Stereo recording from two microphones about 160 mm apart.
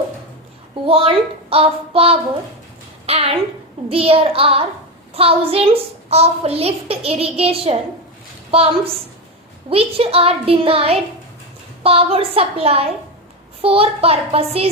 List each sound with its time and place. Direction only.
0.9 s a woman's voice: 35° right (ahead or behind)